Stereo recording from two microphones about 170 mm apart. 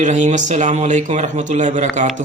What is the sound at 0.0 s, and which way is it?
Speech, 45° right (ahead or behind).